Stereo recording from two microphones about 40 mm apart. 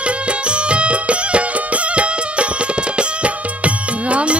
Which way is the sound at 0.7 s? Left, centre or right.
Right.